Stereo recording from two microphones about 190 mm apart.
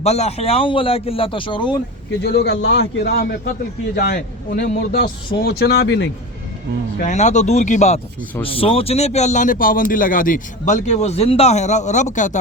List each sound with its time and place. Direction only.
0.0 s a man's voice: 35° left (ahead or behind)
2.2 s speech: 60° left (ahead or behind)
7.0 s speech: 40° left (ahead or behind)